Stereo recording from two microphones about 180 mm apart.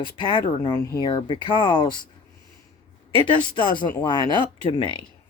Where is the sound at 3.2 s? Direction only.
25° left (ahead or behind).